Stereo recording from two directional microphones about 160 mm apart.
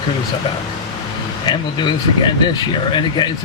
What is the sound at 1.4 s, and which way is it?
Speech, 30° left (ahead or behind).